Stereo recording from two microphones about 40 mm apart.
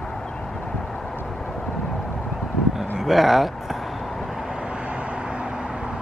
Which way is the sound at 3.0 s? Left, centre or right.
Centre.